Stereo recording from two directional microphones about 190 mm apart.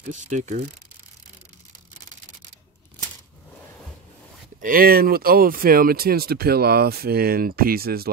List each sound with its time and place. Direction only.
0.3 s speech: 40° right (ahead or behind)
4.6 s speech: 50° right (ahead or behind)